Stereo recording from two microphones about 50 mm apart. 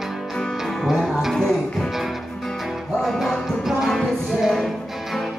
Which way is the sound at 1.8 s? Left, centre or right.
Centre.